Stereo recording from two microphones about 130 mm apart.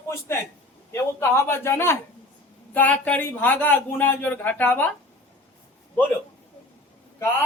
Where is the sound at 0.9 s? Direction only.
20° left (ahead or behind).